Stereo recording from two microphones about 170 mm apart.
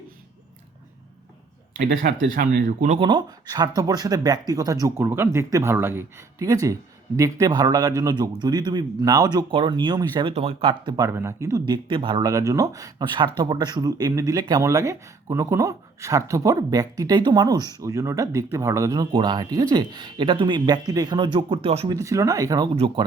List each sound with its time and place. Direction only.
2.3 s speech: 55° right (ahead or behind)
3.0 s speech: 25° right (ahead or behind)
21.9 s speech: 20° right (ahead or behind)